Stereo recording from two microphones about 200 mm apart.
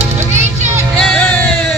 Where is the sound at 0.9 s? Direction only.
5° left (ahead or behind).